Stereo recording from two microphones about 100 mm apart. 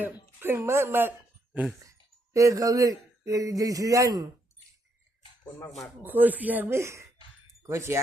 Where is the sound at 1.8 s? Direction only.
35° right (ahead or behind).